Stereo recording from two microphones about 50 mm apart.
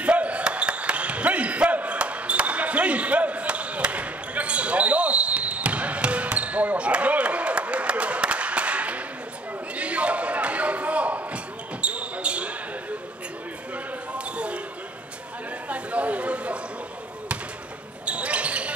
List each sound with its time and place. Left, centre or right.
0.0 s basketball bounce: right
9.8 s a sound: right
11.8 s basketball bounce: right
14.1 s basketball bounce: right
15.7 s chatter: right
18.0 s basketball bounce: right